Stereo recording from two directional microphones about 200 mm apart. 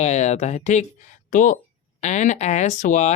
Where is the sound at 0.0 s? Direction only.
35° left (ahead or behind).